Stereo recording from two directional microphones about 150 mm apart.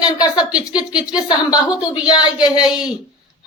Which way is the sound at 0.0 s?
25° left (ahead or behind).